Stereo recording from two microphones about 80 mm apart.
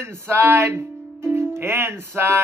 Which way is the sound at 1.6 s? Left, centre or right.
Right.